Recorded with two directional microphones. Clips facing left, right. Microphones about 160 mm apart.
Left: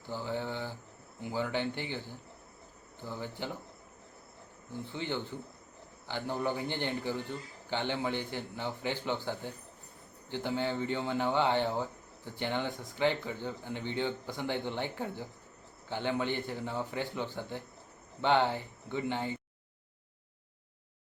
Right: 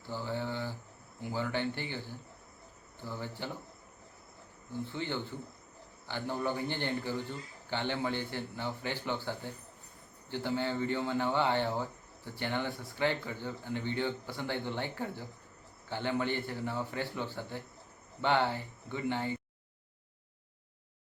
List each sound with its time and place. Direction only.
0.0 s a sound: 15° left (ahead or behind)
1.2 s speech: 15° left (ahead or behind)
4.7 s speech: 15° left (ahead or behind)